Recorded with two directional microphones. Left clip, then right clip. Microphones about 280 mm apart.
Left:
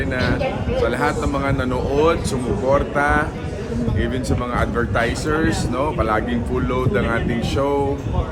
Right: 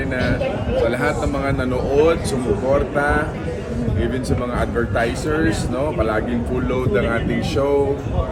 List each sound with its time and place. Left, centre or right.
0.9 s a man's voice: centre